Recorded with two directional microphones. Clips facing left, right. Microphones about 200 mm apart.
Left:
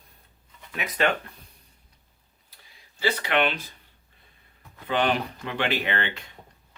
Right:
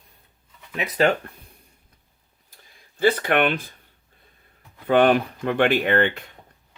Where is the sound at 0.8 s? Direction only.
35° right (ahead or behind).